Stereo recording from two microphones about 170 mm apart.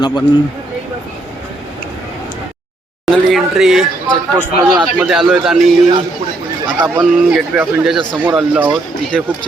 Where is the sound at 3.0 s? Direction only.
Centre (ahead or behind).